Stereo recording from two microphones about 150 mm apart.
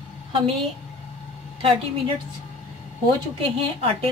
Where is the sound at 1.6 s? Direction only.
35° right (ahead or behind).